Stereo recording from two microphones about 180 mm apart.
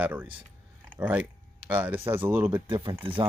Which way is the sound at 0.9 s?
10° right (ahead or behind).